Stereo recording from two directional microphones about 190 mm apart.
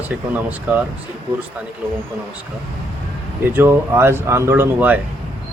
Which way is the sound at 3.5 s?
10° right (ahead or behind).